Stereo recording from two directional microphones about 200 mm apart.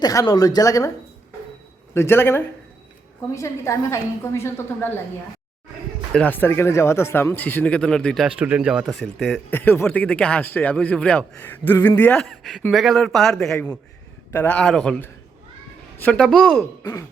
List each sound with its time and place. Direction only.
0.0 s speech: 20° left (ahead or behind)
1.9 s speech: 10° left (ahead or behind)
6.1 s a man's voice: 10° left (ahead or behind)
9.5 s a man's voice: 10° left (ahead or behind)
16.8 s speech: 15° left (ahead or behind)